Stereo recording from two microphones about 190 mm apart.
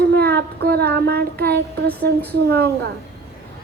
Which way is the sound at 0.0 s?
55° right (ahead or behind).